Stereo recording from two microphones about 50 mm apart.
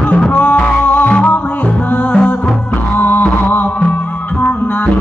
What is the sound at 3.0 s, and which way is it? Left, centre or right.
Music, left.